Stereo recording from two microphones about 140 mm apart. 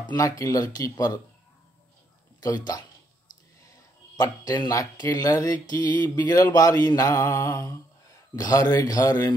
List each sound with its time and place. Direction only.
0.0 s speech: 25° left (ahead or behind)
2.4 s speech: 25° left (ahead or behind)
4.2 s speech: 25° left (ahead or behind)